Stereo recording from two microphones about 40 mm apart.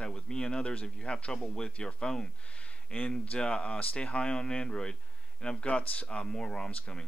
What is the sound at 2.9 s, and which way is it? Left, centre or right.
Speech, left.